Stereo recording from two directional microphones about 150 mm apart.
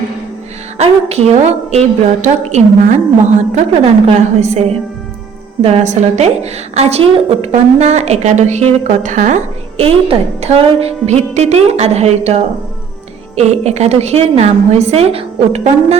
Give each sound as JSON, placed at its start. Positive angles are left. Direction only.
{"t": 0.8, "sound": "a woman's voice", "side_deg": -45}